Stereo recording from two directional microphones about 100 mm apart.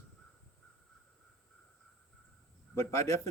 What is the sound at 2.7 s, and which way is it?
Speech, 30° left (ahead or behind).